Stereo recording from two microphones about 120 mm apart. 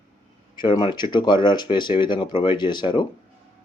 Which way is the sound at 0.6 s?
40° left (ahead or behind).